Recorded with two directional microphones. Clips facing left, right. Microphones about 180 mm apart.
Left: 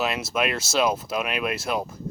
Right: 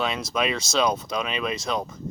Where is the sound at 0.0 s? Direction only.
5° left (ahead or behind).